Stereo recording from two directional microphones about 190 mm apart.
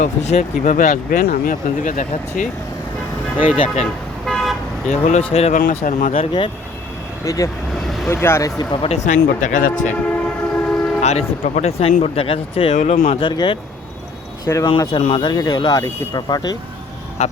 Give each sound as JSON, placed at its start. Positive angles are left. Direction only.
{"t": 0.0, "sound": "speech", "side_deg": 35}
{"t": 4.3, "sound": "car", "side_deg": 5}
{"t": 4.9, "sound": "speech", "side_deg": 35}
{"t": 6.1, "sound": "speech", "side_deg": 25}
{"t": 9.0, "sound": "speech", "side_deg": 45}
{"t": 10.5, "sound": "train", "side_deg": 5}
{"t": 11.0, "sound": "speech", "side_deg": 35}
{"t": 14.4, "sound": "speech", "side_deg": 15}
{"t": 14.7, "sound": "speech", "side_deg": 25}
{"t": 17.2, "sound": "speech", "side_deg": 35}